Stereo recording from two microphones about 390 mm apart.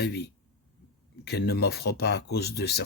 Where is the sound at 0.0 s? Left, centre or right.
Left.